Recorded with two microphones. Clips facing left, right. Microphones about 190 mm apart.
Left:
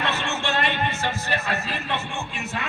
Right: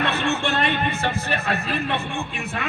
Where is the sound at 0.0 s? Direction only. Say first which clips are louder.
Right 4 dB; 55° right (ahead or behind).